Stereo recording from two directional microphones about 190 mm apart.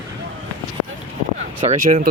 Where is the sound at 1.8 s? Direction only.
45° right (ahead or behind).